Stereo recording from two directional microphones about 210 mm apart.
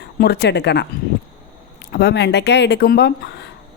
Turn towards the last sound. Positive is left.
turn(degrees=50)  # may be behind; listen again after turning